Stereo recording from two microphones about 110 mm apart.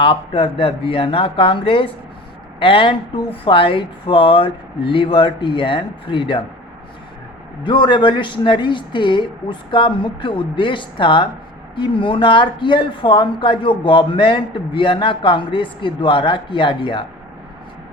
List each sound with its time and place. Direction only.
0.0 s speech: 55° left (ahead or behind)
7.6 s speech: 50° left (ahead or behind)